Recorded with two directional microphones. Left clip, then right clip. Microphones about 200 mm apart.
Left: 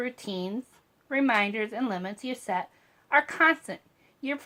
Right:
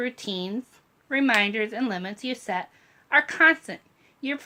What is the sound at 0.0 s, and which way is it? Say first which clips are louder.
Speech: right 3 dB; 10° right (ahead or behind).